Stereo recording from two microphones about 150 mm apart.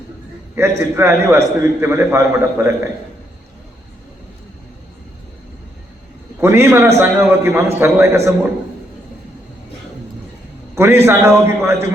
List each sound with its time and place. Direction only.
0.5 s a man's voice: 15° right (ahead or behind)
6.4 s a man's voice: 15° right (ahead or behind)
10.8 s a man's voice: 15° right (ahead or behind)